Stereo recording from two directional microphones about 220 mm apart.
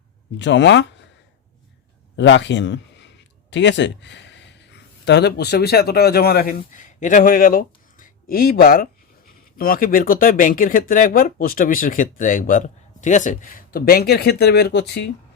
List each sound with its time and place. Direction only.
0.3 s speech: 55° left (ahead or behind)
2.1 s a man's voice: 55° left (ahead or behind)